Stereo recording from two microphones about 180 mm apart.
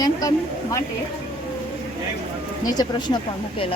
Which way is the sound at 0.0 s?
20° left (ahead or behind).